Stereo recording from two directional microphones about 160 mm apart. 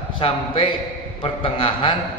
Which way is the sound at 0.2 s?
30° left (ahead or behind).